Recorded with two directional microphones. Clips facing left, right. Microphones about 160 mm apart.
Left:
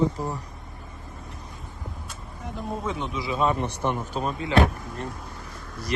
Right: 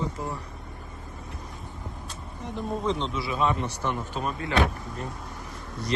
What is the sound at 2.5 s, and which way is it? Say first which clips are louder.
Speech: right 2 dB; 5° left (ahead or behind).